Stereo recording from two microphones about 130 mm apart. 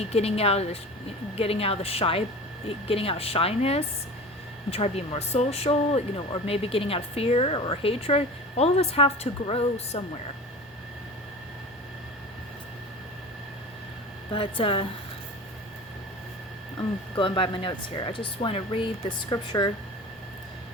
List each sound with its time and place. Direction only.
0.0 s speech: 50° left (ahead or behind)
14.3 s speech: 40° left (ahead or behind)
17.2 s speech: 45° left (ahead or behind)
19.3 s speech: 35° left (ahead or behind)